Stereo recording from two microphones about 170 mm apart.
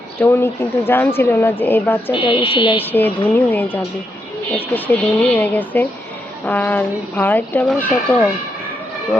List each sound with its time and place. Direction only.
0.2 s speech: 15° left (ahead or behind)
2.1 s speech: 30° left (ahead or behind)
2.8 s speech: 10° left (ahead or behind)